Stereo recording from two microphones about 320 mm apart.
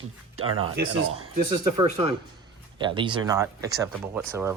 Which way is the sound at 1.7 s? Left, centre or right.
Centre.